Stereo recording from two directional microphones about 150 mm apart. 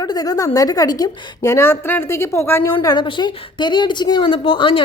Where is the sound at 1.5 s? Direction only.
15° left (ahead or behind); by 4.8 s 35° left (ahead or behind).